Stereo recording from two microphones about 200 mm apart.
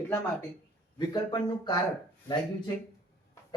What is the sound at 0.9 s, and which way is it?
Speech, 20° left (ahead or behind).